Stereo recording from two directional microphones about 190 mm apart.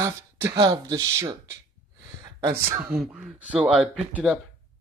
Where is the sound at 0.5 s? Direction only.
25° right (ahead or behind).